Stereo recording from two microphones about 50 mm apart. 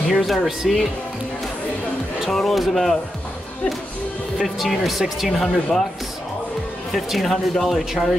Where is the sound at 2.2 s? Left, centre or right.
Centre.